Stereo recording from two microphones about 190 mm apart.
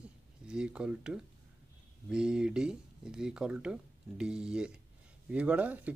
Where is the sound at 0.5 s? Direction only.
5° right (ahead or behind).